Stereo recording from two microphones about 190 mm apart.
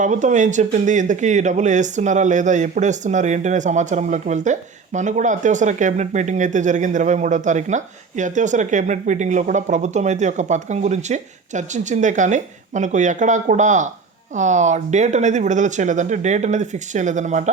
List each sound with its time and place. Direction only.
0.0 s speech: 40° right (ahead or behind)